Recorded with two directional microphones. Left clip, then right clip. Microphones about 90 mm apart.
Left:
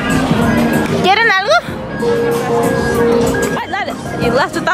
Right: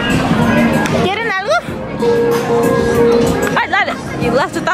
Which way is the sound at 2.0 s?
15° right (ahead or behind).